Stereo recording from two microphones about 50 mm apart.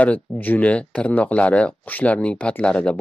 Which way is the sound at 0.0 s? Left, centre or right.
Left.